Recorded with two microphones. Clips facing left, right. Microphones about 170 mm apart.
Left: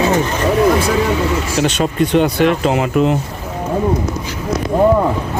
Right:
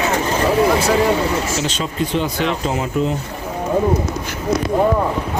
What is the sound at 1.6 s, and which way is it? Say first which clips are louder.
Speech: left 6 dB; 65° left (ahead or behind).